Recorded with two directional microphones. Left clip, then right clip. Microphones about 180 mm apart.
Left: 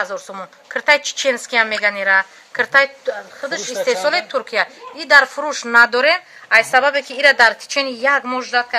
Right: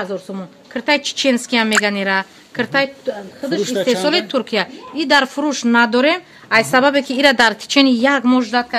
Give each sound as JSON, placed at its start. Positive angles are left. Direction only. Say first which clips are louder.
{"t": 0.0, "sound": "a woman's voice", "louder": "left 1 dB", "side_deg": -5}
{"t": 6.5, "sound": "a woman's voice", "louder": "even", "side_deg": -35}